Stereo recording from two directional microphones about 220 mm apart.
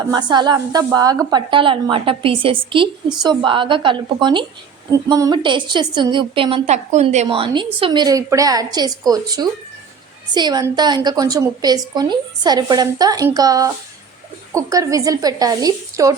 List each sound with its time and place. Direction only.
0.0 s a woman's voice: 20° right (ahead or behind)